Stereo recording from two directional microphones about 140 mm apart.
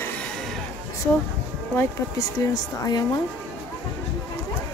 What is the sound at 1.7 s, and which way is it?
A woman's voice, 20° left (ahead or behind).